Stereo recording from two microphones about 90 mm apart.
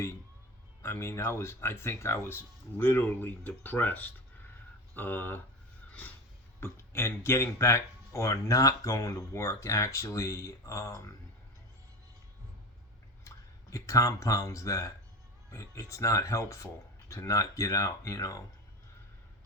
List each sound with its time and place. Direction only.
0.8 s speech: 30° left (ahead or behind)
5.9 s a sound: 20° left (ahead or behind)
6.6 s speech: 30° left (ahead or behind)
13.2 s speech: 35° left (ahead or behind)